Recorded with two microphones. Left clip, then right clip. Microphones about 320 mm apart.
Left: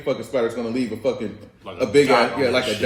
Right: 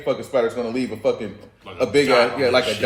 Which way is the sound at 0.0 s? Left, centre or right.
Centre.